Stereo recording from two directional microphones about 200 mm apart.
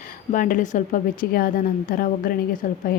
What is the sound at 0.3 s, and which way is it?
A woman's voice, 45° left (ahead or behind).